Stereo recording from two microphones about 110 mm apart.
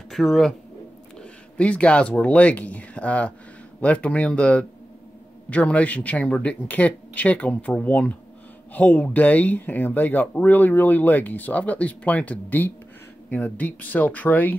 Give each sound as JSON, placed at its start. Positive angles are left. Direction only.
{"t": 0.1, "sound": "speech", "side_deg": 0}